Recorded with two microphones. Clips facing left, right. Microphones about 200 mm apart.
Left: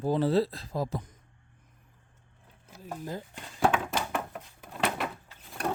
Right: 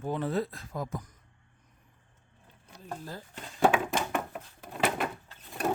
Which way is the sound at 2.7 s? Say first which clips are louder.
Left 1 dB; 5° left (ahead or behind).